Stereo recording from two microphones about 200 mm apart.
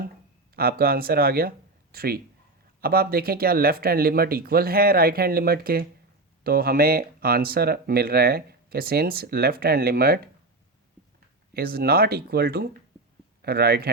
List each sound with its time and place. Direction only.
0.5 s speech: 50° right (ahead or behind)
11.5 s speech: 50° right (ahead or behind)